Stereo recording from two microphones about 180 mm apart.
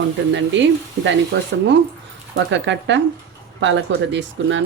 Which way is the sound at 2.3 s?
85° right.